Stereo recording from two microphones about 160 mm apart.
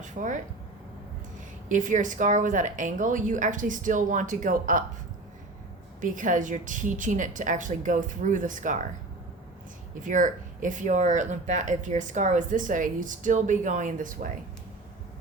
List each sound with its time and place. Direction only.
0.0 s speech: 50° right (ahead or behind)
1.7 s speech: 50° right (ahead or behind)
6.0 s speech: 55° right (ahead or behind)
10.0 s speech: 50° right (ahead or behind)